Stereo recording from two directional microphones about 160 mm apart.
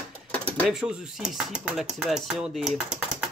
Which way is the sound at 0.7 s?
5° right (ahead or behind).